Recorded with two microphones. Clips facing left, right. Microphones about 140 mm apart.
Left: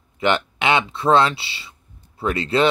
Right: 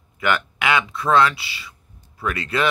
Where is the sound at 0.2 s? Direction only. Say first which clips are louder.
Left 2 dB; 25° left (ahead or behind).